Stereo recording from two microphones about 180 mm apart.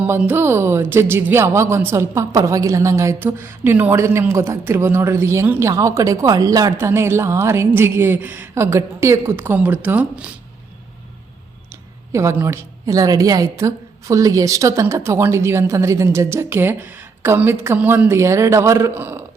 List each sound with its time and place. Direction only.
0.0 s speech: 10° right (ahead or behind)
11.7 s speech: 15° right (ahead or behind)